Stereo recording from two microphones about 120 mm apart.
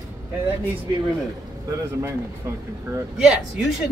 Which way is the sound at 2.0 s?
25° right (ahead or behind).